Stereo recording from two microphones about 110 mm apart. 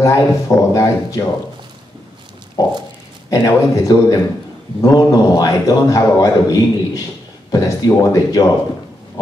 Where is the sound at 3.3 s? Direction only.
35° left (ahead or behind).